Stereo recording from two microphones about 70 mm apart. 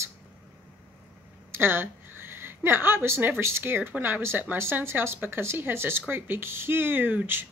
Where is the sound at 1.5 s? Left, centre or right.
Right.